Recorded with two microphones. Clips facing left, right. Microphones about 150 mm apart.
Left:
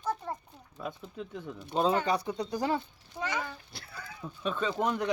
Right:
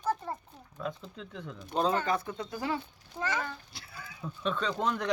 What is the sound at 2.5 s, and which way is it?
Speech, 40° left (ahead or behind).